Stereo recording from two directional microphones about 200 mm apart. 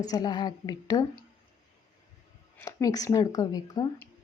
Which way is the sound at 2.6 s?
15° left (ahead or behind).